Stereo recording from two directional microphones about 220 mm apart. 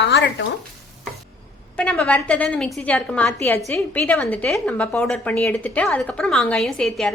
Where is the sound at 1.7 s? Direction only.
5° left (ahead or behind).